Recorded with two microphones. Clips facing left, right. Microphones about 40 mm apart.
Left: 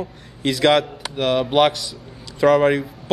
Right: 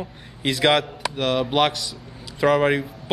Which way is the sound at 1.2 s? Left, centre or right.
Centre.